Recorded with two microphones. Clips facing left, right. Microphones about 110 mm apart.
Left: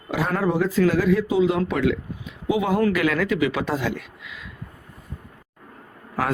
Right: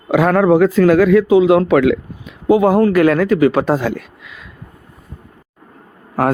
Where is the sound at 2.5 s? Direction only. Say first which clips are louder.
Right 9 dB; 50° right (ahead or behind).